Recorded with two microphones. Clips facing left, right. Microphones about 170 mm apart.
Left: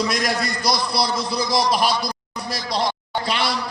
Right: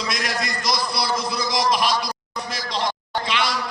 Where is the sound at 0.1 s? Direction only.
35° left (ahead or behind).